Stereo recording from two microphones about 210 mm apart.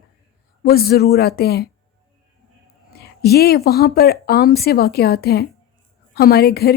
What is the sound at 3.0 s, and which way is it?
Speech, 50° left (ahead or behind).